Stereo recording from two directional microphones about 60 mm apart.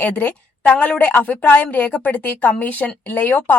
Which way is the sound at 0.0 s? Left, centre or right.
Left.